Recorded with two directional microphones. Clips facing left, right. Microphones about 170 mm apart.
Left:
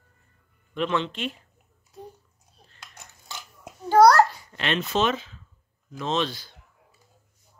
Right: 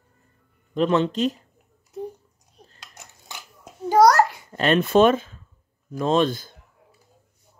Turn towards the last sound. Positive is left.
turn(degrees=-50)  # may be behind; listen again after turning